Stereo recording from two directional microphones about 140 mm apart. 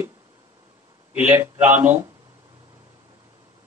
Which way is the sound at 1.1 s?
15° right (ahead or behind).